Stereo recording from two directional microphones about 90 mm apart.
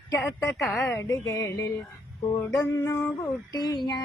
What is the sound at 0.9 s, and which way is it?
Music, 35° left (ahead or behind).